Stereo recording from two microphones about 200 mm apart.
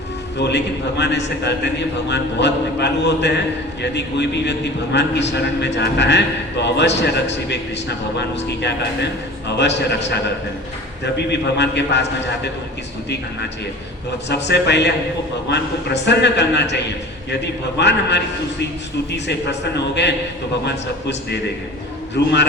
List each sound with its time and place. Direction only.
0.3 s a man's voice: 60° left (ahead or behind)
14.3 s a man's voice: 60° left (ahead or behind)